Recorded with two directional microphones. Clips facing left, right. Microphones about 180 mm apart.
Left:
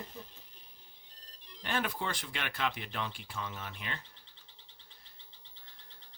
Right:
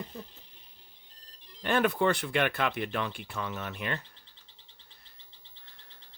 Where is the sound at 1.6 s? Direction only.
60° right (ahead or behind).